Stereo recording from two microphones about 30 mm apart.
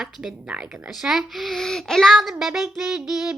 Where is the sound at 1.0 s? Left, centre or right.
Right.